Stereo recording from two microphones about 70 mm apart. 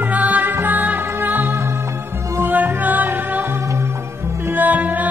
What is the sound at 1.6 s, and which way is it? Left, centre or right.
Music, right.